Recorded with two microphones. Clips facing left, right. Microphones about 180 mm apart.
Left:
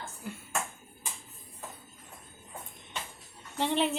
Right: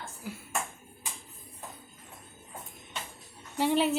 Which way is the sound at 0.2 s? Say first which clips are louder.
Right 1 dB; 5° right (ahead or behind).